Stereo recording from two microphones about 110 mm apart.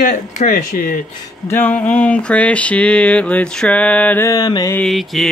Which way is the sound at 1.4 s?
20° left (ahead or behind).